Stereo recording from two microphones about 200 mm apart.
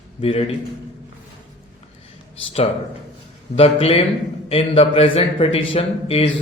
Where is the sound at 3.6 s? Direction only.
30° left (ahead or behind).